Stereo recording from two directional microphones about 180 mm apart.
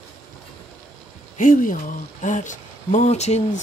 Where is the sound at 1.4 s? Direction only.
50° left (ahead or behind).